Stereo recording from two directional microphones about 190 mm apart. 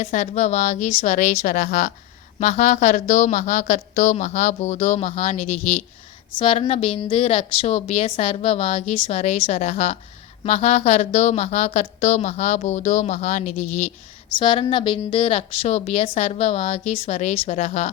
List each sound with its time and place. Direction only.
0.0 s a woman's voice: 40° left (ahead or behind)
14.3 s a woman's voice: 25° left (ahead or behind); by 17.8 s 40° left (ahead or behind)